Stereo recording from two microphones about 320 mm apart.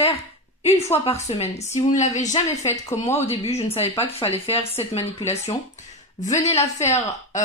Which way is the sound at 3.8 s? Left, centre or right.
Centre.